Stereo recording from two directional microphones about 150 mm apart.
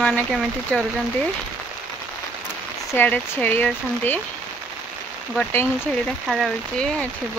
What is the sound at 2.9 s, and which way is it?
Speech, 10° left (ahead or behind).